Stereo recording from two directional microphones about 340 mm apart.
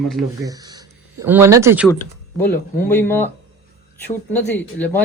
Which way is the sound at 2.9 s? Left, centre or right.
Centre.